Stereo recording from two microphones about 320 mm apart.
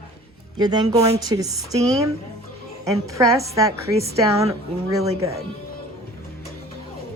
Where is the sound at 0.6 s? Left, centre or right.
Centre.